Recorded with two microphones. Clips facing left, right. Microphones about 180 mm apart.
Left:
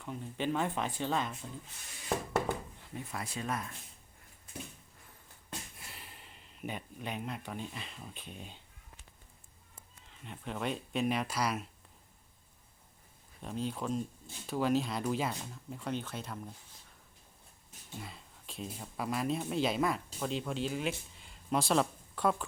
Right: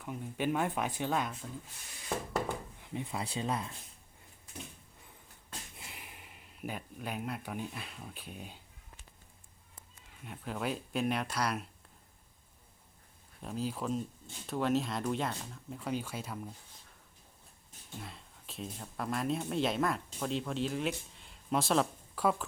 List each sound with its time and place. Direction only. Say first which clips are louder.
0.0 s speech: right 1 dB; 10° right (ahead or behind)
2.8 s speech: right 3 dB; 20° right (ahead or behind)
5.7 s speech: right 1 dB; 15° right (ahead or behind)
10.2 s speech: even; centre (ahead or behind)
13.4 s speech: even; centre (ahead or behind)
17.9 s speech: even; centre (ahead or behind)